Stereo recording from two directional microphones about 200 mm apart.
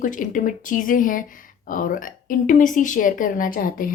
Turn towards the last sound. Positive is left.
turn(degrees=45)  # may be behind; listen again after turning